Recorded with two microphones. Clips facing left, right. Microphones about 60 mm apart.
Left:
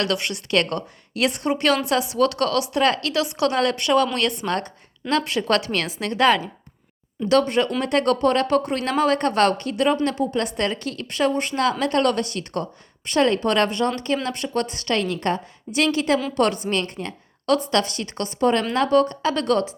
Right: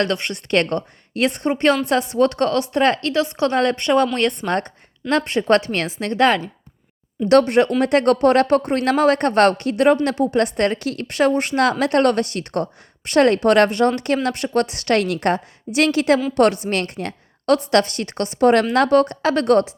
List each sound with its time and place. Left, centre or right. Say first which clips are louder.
0.0 s speech: right 3 dB; right
7.3 s a woman's voice: right 5 dB; right